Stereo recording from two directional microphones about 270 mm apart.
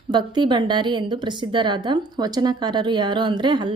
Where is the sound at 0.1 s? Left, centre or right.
Centre.